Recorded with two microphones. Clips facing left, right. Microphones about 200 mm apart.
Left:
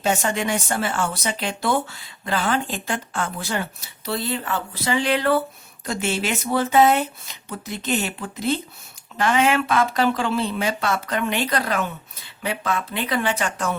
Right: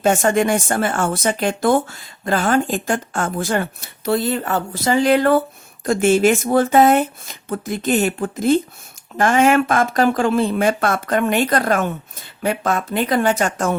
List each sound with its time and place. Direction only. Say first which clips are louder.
0.0 s speech: right 7 dB; 50° right (ahead or behind)